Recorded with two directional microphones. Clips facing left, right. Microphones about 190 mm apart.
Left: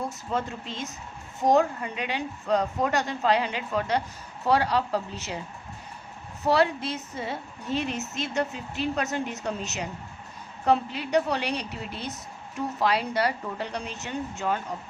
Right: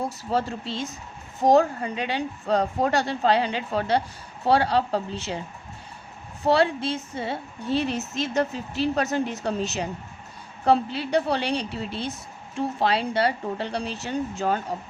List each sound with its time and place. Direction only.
0.0 s a woman's voice: 35° right (ahead or behind)
6.4 s a woman's voice: 30° right (ahead or behind)